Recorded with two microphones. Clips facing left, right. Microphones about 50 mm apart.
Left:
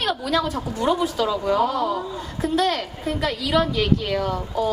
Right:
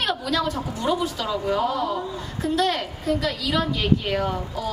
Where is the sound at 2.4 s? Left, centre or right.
Left.